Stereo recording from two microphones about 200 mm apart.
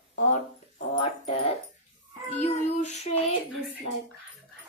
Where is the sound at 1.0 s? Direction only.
30° left (ahead or behind).